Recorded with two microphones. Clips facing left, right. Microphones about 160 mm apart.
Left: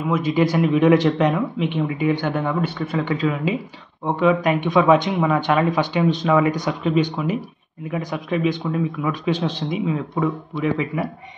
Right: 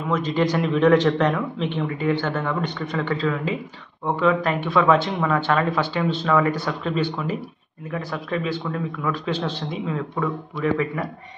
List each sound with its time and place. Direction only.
0.1 s speech: 10° left (ahead or behind)